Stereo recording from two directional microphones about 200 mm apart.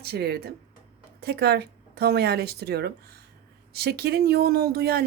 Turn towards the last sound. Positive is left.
turn(degrees=-50)  # may be behind; listen again after turning